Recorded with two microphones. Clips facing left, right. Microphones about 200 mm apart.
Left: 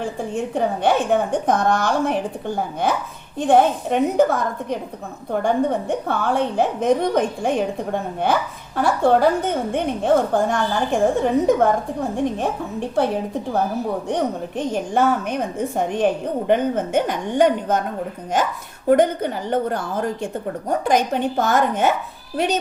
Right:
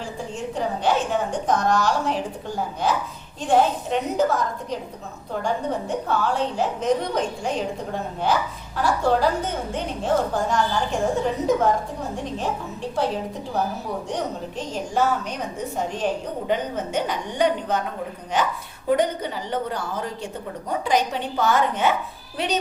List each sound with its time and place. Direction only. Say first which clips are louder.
0.0 s a woman's voice: left 6 dB; 55° left (ahead or behind)
14.1 s a woman's voice: left 5 dB; 55° left (ahead or behind)
18.9 s a woman's voice: left 5 dB; 50° left (ahead or behind)